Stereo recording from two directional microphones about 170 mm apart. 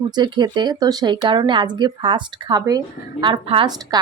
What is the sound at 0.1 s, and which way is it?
Speech, 25° right (ahead or behind).